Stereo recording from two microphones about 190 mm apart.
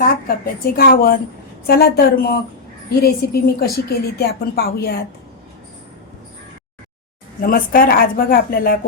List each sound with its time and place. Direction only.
0.0 s a woman's voice: 50° left (ahead or behind)
7.4 s speech: 50° left (ahead or behind)